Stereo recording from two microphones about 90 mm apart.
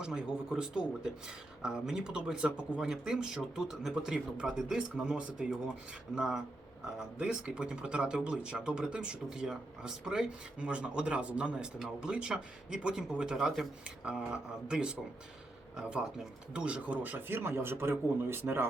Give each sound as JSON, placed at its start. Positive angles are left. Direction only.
{"t": 0.0, "sound": "speech", "side_deg": -5}